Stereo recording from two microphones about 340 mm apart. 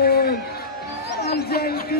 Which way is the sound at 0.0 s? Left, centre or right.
Left.